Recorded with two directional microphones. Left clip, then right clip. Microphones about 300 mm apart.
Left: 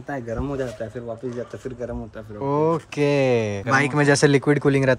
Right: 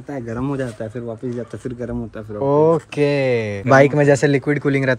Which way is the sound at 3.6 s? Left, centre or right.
Centre.